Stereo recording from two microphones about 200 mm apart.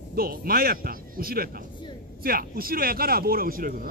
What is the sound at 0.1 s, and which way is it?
Speech, 45° right (ahead or behind).